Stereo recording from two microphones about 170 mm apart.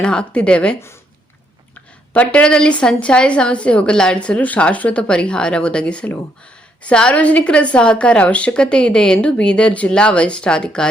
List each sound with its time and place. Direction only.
0.0 s a woman's voice: 5° left (ahead or behind)
2.1 s a woman's voice: 5° left (ahead or behind)